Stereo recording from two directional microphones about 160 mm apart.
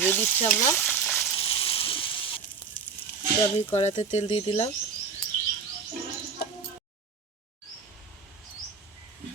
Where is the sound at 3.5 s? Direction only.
45° left (ahead or behind).